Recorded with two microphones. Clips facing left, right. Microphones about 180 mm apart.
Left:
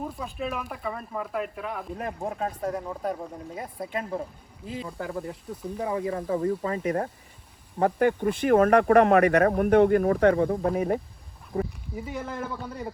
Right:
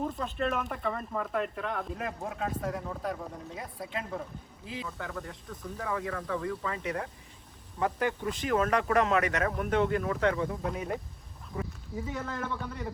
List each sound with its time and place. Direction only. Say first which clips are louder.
0.0 s speech: right 1 dB; 5° left (ahead or behind)
2.0 s speech: left 4 dB; 35° left (ahead or behind)
4.8 s speech: left 6 dB; 35° left (ahead or behind)
11.5 s a sound: left 8 dB; 30° left (ahead or behind)
11.9 s speech: left 2 dB; 15° left (ahead or behind)